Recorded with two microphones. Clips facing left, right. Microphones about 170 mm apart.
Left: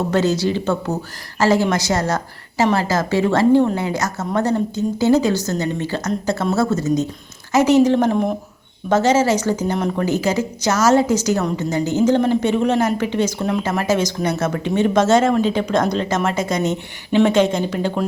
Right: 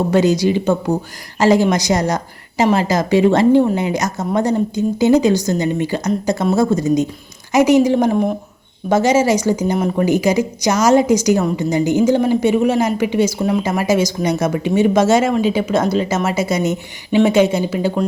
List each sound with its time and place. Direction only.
0.1 s speech: 15° right (ahead or behind)